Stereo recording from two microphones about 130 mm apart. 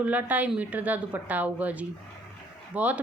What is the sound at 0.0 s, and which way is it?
A woman's voice, 10° right (ahead or behind).